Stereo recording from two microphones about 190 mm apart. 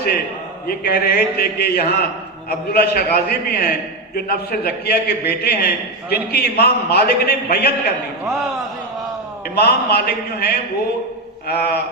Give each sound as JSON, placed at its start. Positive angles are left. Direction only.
{"t": 0.7, "sound": "a man's voice", "side_deg": 55}
{"t": 9.6, "sound": "a man's voice", "side_deg": 55}